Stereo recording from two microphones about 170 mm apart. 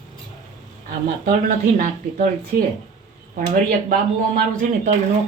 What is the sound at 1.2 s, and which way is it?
Speech, 55° right (ahead or behind).